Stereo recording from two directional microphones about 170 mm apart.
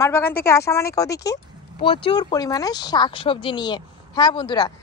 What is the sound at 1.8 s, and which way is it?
Speech, 30° left (ahead or behind).